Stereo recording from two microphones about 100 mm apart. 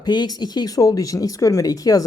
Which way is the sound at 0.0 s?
45° left (ahead or behind).